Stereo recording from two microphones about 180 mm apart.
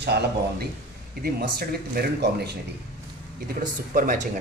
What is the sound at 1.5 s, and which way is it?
Speech, 60° right (ahead or behind).